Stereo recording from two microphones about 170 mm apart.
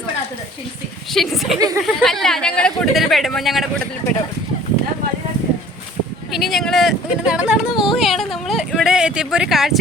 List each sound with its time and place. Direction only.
1.1 s speech: centre (ahead or behind)
1.5 s speech: 20° right (ahead or behind)
1.8 s speech: centre (ahead or behind)
6.3 s a sound: centre (ahead or behind)